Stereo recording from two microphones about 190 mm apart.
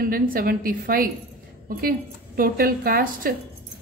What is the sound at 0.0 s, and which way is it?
A woman's voice, 50° right (ahead or behind).